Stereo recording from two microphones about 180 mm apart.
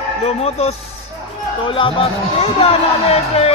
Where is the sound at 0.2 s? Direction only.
35° left (ahead or behind).